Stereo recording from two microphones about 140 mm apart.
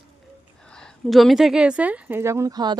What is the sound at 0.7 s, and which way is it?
Speech, 5° left (ahead or behind).